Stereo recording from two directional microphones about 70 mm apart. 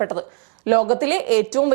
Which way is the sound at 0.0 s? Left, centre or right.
Right.